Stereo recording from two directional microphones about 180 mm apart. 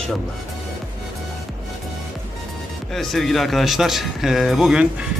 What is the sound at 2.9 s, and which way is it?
Speech, centre (ahead or behind).